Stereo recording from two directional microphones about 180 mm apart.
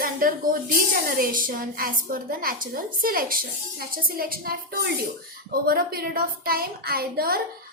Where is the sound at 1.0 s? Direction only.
50° right (ahead or behind).